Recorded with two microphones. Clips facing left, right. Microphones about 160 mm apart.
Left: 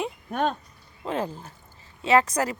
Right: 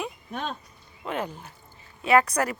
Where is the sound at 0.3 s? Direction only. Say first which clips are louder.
Left 10 dB; 50° left (ahead or behind).